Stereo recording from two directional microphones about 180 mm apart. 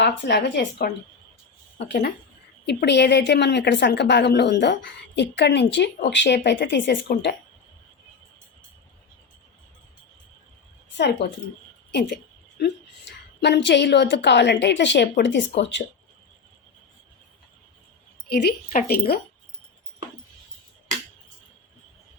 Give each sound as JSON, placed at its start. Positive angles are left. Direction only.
{"t": 0.0, "sound": "a woman's voice", "side_deg": 70}
{"t": 7.1, "sound": "a woman's voice", "side_deg": 60}
{"t": 10.9, "sound": "a woman's voice", "side_deg": 70}
{"t": 11.9, "sound": "a sound", "side_deg": 75}
{"t": 13.4, "sound": "a woman's voice", "side_deg": 75}
{"t": 18.7, "sound": "a woman's voice", "side_deg": 55}